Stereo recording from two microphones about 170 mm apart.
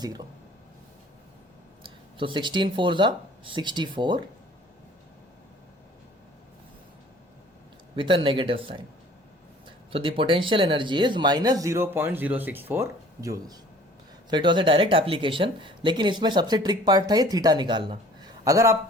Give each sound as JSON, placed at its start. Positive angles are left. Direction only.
{"t": 0.0, "sound": "speech", "side_deg": -25}
{"t": 1.8, "sound": "speech", "side_deg": -30}
{"t": 7.9, "sound": "speech", "side_deg": -30}
{"t": 9.9, "sound": "speech", "side_deg": -30}
{"t": 14.3, "sound": "speech", "side_deg": -25}